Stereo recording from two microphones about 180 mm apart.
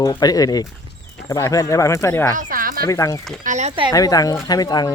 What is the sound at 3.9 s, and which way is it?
Speech, 20° left (ahead or behind).